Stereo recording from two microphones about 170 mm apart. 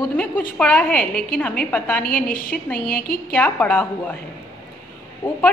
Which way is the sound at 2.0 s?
55° left (ahead or behind).